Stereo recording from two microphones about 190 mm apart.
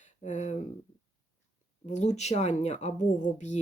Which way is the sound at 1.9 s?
40° left (ahead or behind).